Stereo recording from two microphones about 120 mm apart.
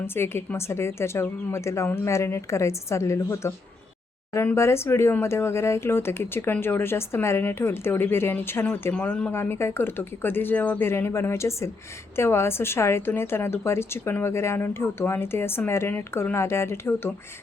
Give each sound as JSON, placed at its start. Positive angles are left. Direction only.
{"t": 0.0, "sound": "speech", "side_deg": 20}